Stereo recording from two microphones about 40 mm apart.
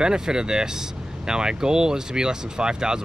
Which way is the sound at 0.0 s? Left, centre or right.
Centre.